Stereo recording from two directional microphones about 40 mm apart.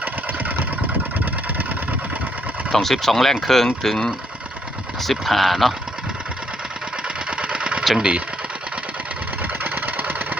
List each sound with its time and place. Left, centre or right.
1.2 s vehicle: right
2.7 s speech: centre
7.3 s engine: right
7.9 s speech: right
9.4 s vehicle: right